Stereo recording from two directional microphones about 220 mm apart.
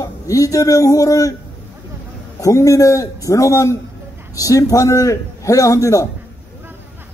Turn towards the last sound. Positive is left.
turn(degrees=15)  # may be behind; listen again after turning